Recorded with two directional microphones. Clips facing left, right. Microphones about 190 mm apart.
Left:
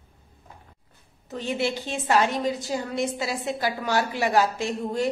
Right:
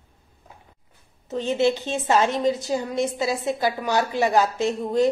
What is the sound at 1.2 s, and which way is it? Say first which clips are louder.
A woman's voice: right 6 dB; 20° right (ahead or behind).